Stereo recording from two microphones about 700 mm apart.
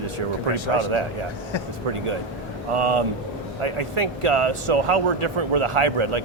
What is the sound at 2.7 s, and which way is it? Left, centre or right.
Speech, right.